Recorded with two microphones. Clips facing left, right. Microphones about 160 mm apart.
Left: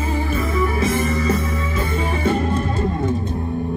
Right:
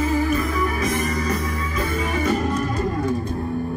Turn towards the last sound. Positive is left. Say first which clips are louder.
# left 1 dB
turn(degrees=30)  # may be behind; listen again after turning